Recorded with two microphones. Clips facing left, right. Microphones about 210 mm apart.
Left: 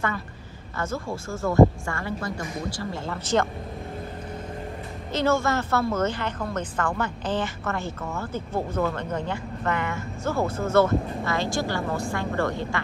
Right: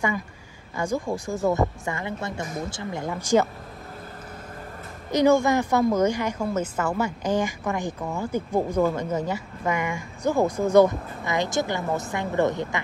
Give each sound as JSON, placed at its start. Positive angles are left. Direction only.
{"t": 0.7, "sound": "a woman's voice", "side_deg": -15}
{"t": 5.1, "sound": "a woman's voice", "side_deg": -15}